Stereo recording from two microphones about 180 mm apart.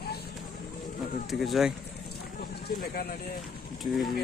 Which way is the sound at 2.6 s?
60° left (ahead or behind).